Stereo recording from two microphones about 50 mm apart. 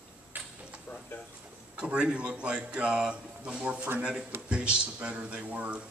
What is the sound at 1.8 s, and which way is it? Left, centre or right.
Speech, centre.